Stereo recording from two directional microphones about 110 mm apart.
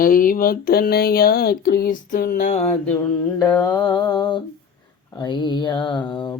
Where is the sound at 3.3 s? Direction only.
35° left (ahead or behind).